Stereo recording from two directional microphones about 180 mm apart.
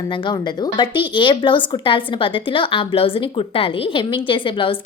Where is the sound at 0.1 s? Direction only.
25° left (ahead or behind).